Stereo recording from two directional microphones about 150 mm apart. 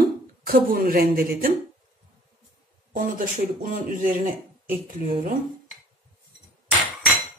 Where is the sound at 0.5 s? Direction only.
75° right (ahead or behind).